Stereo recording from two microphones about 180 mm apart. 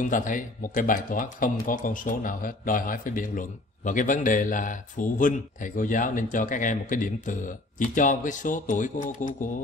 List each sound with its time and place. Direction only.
0.0 s speech: 45° left (ahead or behind)